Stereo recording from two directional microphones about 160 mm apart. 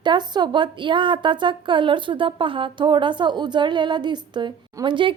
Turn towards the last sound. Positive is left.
turn(degrees=-30)  # may be behind; listen again after turning